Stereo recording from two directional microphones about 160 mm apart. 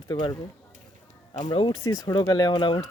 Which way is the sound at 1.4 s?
30° left (ahead or behind).